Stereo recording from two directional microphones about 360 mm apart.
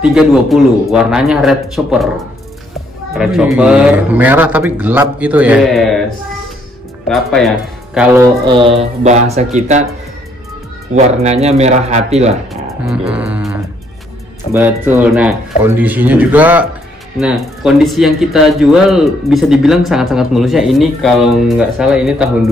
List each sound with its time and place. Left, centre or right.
0.0 s speech: centre
3.2 s speech: centre
7.1 s speech: centre
11.0 s speech: centre
12.8 s speech: centre